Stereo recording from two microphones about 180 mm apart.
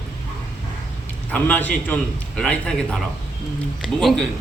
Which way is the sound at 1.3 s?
10° left (ahead or behind).